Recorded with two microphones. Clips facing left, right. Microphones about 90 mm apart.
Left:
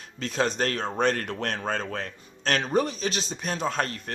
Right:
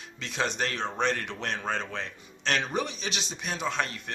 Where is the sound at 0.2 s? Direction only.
40° left (ahead or behind).